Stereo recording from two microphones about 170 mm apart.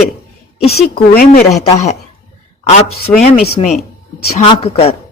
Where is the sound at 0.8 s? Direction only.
65° left (ahead or behind).